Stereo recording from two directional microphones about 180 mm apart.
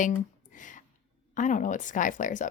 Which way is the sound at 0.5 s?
45° left (ahead or behind).